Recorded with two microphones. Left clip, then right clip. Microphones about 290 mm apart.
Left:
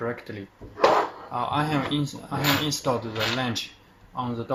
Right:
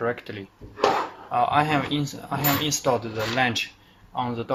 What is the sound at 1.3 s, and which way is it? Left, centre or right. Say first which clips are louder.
Speech: right 5 dB; right.